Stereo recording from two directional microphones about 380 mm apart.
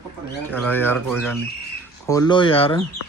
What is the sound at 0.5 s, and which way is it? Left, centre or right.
Speech, centre.